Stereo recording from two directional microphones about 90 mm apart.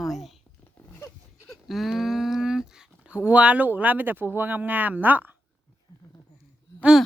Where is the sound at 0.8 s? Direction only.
30° left (ahead or behind).